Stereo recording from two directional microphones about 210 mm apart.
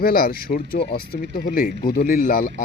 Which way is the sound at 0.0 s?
45° left (ahead or behind).